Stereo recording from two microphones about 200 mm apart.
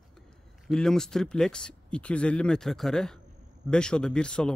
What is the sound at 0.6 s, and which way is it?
A man's voice, 5° left (ahead or behind).